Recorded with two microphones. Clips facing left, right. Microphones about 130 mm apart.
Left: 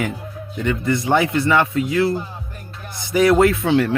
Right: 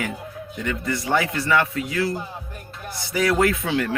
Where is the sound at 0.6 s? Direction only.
25° left (ahead or behind).